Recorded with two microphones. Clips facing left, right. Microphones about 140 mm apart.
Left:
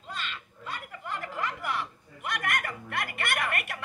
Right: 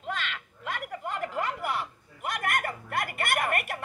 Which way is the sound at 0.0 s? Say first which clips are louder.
Right 5 dB; 90° right.